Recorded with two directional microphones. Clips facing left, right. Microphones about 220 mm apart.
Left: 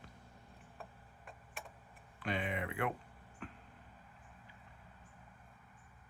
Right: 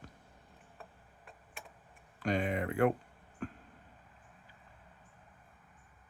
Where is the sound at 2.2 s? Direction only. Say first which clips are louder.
Right 6 dB; 40° right (ahead or behind).